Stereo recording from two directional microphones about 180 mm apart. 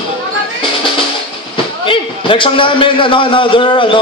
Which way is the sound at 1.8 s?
30° left (ahead or behind).